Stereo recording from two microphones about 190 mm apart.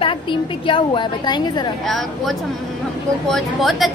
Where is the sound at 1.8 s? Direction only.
Centre (ahead or behind).